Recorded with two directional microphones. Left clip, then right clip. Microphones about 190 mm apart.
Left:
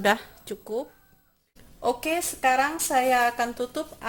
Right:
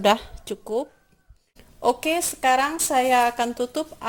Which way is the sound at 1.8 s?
45° right (ahead or behind).